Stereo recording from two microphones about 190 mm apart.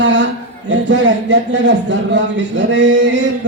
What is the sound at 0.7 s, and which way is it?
A man's voice, 70° right (ahead or behind).